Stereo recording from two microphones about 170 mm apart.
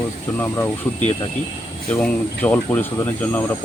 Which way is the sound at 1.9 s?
10° left (ahead or behind).